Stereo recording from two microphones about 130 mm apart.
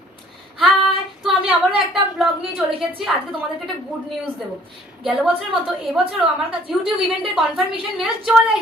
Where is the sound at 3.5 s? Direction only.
Centre (ahead or behind).